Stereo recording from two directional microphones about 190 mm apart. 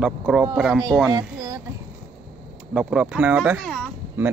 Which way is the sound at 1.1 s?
20° right (ahead or behind).